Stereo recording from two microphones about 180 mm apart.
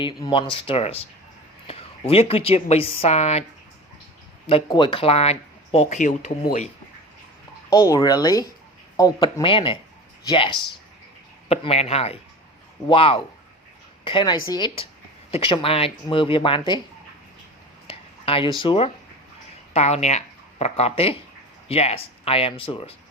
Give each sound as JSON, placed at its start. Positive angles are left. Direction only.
{"t": 0.0, "sound": "a woman's voice", "side_deg": 25}
{"t": 4.4, "sound": "speech", "side_deg": 30}
{"t": 7.7, "sound": "a woman's voice", "side_deg": 20}
{"t": 17.8, "sound": "a sound", "side_deg": 30}
{"t": 19.7, "sound": "speech", "side_deg": 40}